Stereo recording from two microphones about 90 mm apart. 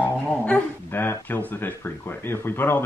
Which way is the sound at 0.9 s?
25° left (ahead or behind).